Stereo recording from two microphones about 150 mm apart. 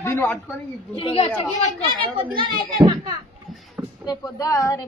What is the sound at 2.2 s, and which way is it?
Speech, 35° right (ahead or behind).